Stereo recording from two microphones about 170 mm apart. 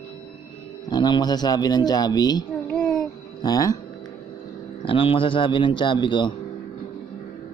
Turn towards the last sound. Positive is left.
turn(degrees=30)  # may be behind; listen again after turning